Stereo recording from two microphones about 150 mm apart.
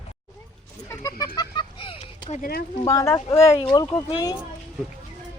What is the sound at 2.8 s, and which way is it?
Speech, 20° left (ahead or behind).